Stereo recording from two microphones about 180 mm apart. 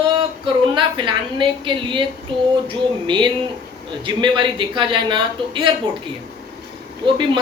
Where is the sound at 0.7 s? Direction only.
25° right (ahead or behind).